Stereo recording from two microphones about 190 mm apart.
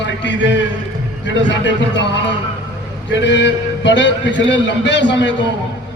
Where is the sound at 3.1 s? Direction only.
70° left (ahead or behind).